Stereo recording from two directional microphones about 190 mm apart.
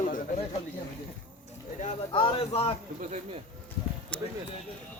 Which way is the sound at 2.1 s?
25° left (ahead or behind).